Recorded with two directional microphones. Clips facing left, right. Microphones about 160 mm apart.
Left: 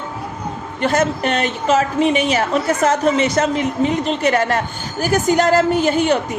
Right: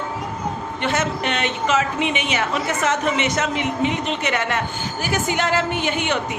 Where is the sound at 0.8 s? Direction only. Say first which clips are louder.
Left 6 dB; 40° left (ahead or behind).